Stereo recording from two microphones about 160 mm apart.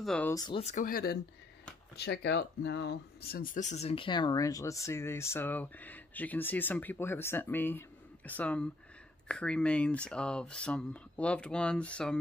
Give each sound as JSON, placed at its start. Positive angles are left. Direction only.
{"t": 0.0, "sound": "speech", "side_deg": 0}
{"t": 0.3, "sound": "speech", "side_deg": 25}
{"t": 0.6, "sound": "speech", "side_deg": 45}
{"t": 0.8, "sound": "speech", "side_deg": 65}
{"t": 2.0, "sound": "speech", "side_deg": 90}